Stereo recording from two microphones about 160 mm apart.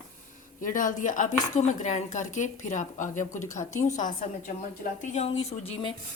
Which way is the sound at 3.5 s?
20° left (ahead or behind).